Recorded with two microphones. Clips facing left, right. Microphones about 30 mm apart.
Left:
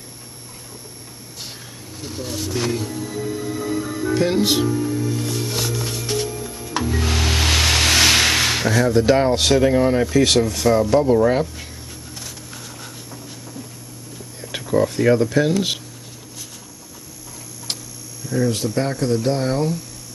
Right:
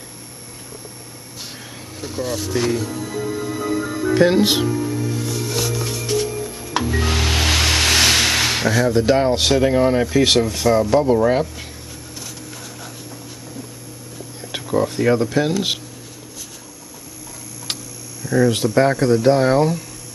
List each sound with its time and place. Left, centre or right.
2.0 s speech: centre
4.8 s music: centre
5.2 s music: centre
6.3 s music: centre
14.5 s speech: centre
18.2 s hum: centre
18.6 s speech: right